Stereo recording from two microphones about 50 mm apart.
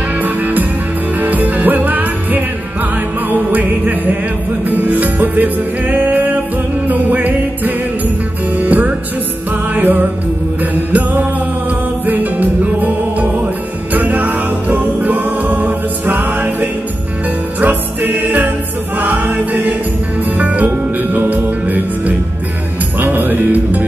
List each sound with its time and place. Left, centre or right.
0.2 s music: right